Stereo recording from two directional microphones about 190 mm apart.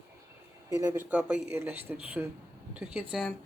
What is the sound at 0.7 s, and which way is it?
A woman's voice, 15° right (ahead or behind).